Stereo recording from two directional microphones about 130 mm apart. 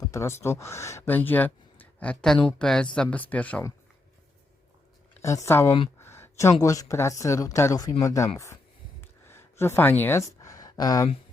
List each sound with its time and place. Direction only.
0.0 s speech: 25° left (ahead or behind)
5.2 s speech: 25° left (ahead or behind)
9.0 s a sound: 20° left (ahead or behind)